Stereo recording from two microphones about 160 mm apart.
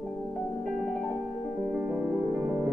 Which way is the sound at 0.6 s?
Centre (ahead or behind).